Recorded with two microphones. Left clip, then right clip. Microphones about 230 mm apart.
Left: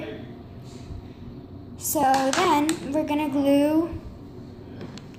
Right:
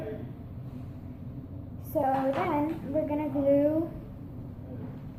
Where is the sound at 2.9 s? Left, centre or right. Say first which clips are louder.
Left 5 dB; left.